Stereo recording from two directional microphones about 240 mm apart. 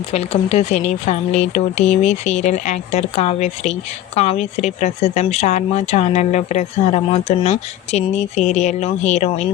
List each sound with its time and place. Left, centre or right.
0.1 s speech: left